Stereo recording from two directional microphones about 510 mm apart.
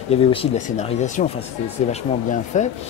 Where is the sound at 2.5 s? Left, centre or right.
Centre.